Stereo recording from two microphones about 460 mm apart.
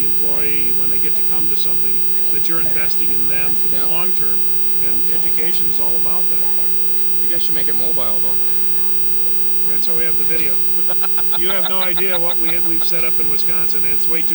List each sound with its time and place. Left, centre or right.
0.0 s speech: left
4.8 s speech: left
7.3 s speech: right
9.7 s speech: left
10.8 s speech: right
11.3 s speech: left